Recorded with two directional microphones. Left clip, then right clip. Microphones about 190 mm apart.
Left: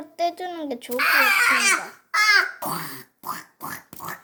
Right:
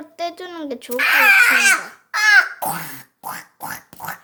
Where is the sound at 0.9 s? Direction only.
25° right (ahead or behind).